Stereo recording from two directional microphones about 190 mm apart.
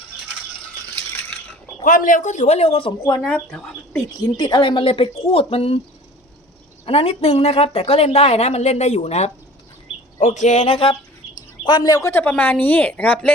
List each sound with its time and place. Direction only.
1.8 s speech: 45° left (ahead or behind); by 3.2 s 25° left (ahead or behind)
3.2 s speech: 5° left (ahead or behind)
4.4 s speech: 25° left (ahead or behind)
6.8 s speech: 30° left (ahead or behind); by 13.3 s 10° left (ahead or behind)